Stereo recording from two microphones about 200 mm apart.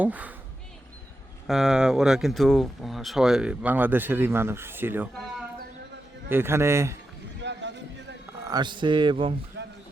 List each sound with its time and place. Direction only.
0.0 s a man's voice: 10° right (ahead or behind)
1.5 s speech: centre (ahead or behind)
6.2 s a man's voice: 10° right (ahead or behind)
7.4 s a sound: 60° right (ahead or behind)
8.4 s speech: 20° right (ahead or behind)
9.6 s a sound: 60° right (ahead or behind)